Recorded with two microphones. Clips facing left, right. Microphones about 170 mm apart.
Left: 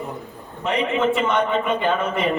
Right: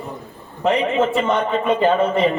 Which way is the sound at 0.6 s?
35° right (ahead or behind).